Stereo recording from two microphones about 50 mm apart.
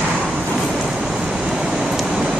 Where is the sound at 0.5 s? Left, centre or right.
Centre.